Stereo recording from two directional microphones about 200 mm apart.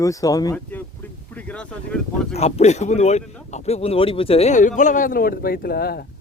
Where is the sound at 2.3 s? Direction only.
30° left (ahead or behind).